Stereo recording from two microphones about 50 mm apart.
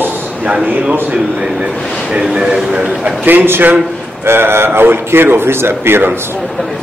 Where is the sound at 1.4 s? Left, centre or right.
Centre.